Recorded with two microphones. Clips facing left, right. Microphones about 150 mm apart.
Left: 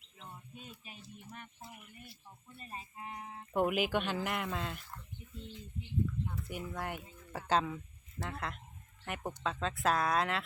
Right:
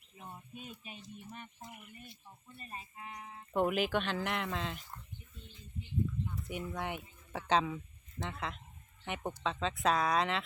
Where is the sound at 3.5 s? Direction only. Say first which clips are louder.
Even; 5° left (ahead or behind).